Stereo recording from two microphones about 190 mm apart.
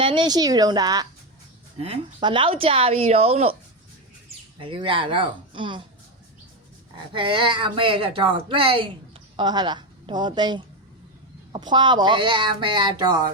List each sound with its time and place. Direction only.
0.0 s speech: 25° right (ahead or behind)
4.5 s speech: 25° right (ahead or behind)
6.9 s a woman's voice: 25° right (ahead or behind)